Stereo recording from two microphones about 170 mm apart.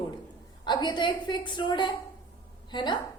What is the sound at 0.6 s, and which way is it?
A woman's voice, 25° left (ahead or behind).